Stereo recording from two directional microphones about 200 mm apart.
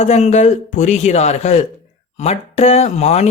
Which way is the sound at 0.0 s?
35° left (ahead or behind).